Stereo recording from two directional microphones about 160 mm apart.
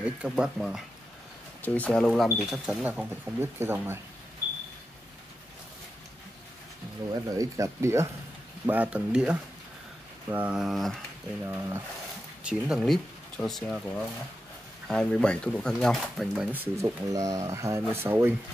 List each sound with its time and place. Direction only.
0.0 s speech: 5° right (ahead or behind)
1.6 s speech: 10° left (ahead or behind); by 4.0 s 15° right (ahead or behind)
7.1 s speech: 20° right (ahead or behind); by 11.0 s centre (ahead or behind)
11.4 s speech: 15° right (ahead or behind)
16.5 s speech: 15° right (ahead or behind)